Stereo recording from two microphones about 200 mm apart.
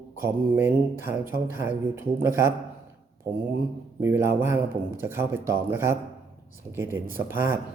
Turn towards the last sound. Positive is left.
turn(degrees=-10)  # may be behind; listen again after turning